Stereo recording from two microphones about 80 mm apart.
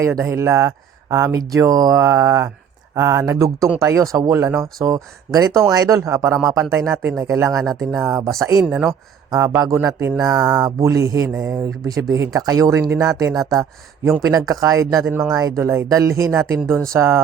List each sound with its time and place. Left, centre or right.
0.2 s speech: right
11.6 s speech: right